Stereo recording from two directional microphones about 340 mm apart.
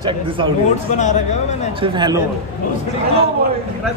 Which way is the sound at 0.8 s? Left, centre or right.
Left.